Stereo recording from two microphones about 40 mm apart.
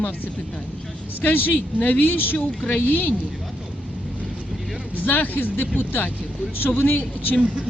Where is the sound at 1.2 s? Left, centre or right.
Left.